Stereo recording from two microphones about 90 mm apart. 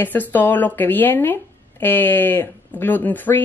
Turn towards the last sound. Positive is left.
turn(degrees=20)  # may be behind; listen again after turning